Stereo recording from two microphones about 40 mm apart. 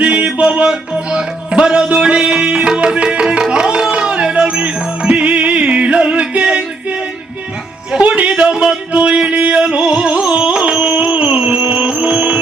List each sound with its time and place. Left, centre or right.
0.0 s music: right
7.9 s music: right